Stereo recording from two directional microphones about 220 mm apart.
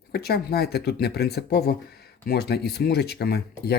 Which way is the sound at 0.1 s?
45° left (ahead or behind).